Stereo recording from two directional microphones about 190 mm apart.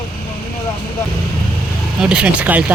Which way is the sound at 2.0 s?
5° right (ahead or behind).